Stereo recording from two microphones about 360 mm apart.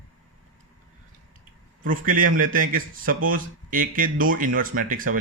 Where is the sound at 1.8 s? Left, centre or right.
Right.